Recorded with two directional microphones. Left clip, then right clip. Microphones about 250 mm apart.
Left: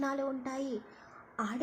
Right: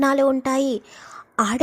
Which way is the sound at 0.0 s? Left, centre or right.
Right.